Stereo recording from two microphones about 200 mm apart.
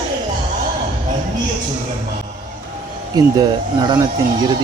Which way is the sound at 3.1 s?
20° right (ahead or behind).